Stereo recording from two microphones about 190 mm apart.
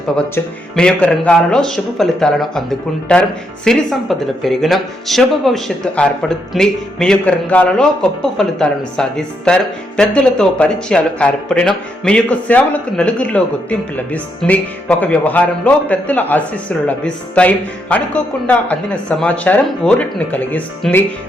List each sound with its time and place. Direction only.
0.2 s speech: 5° left (ahead or behind)